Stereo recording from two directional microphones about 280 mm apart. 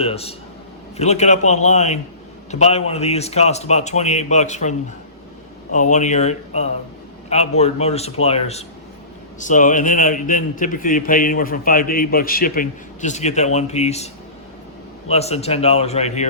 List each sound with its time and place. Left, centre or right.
0.0 s a man's voice: left
5.9 s a man's voice: left
15.1 s a man's voice: left